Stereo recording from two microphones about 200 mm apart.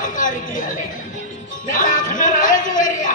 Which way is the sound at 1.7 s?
40° left (ahead or behind).